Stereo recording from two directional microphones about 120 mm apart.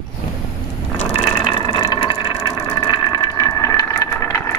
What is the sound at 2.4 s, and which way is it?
Vehicle, 35° left (ahead or behind).